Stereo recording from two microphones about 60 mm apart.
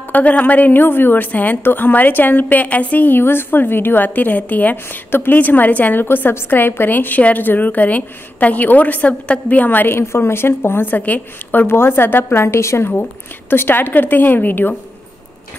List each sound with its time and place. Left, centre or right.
0.1 s a woman's voice: left
11.0 s a woman's voice: left
11.6 s a woman's voice: left
13.5 s a woman's voice: left